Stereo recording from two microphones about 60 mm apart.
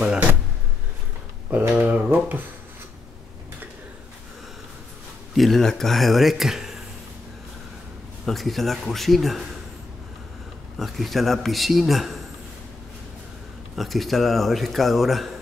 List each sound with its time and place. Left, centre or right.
0.0 s speech: centre
1.7 s speech: right
5.3 s a man's voice: centre
8.3 s a man's voice: centre
10.8 s a man's voice: centre
13.7 s a man's voice: centre